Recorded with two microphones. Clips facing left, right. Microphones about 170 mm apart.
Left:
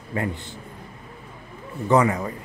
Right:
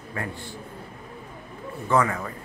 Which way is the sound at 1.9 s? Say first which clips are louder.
Left 4 dB; 20° left (ahead or behind).